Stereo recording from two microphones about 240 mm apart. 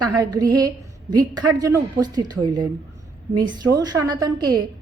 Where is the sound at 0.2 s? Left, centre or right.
Centre.